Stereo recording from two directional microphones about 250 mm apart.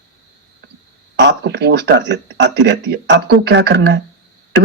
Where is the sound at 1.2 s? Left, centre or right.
Right.